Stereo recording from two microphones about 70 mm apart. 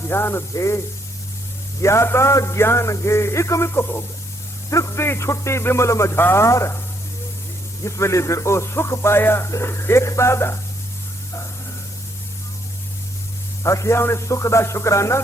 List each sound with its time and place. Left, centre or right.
0.0 s speech: left
1.8 s a man's voice: left
6.4 s speech: left
7.9 s a man's voice: left
13.6 s speech: left